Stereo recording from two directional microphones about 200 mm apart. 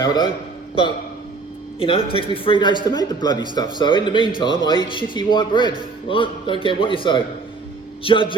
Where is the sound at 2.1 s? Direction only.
25° left (ahead or behind).